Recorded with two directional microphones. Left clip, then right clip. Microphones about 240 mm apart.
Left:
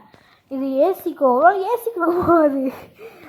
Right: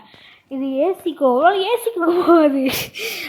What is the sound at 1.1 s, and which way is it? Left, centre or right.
A woman's voice, right.